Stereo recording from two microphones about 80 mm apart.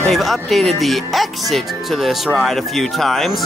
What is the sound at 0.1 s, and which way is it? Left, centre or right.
Speech, centre.